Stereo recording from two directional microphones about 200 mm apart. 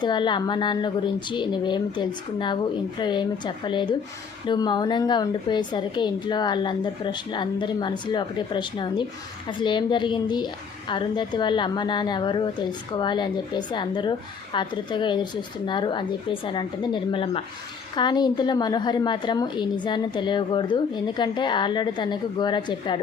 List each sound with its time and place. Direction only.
0.0 s a woman's voice: 20° left (ahead or behind)